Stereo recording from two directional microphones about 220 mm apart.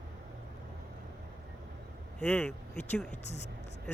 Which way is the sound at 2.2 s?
5° left (ahead or behind).